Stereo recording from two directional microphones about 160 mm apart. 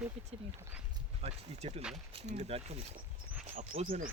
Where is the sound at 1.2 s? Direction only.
40° right (ahead or behind).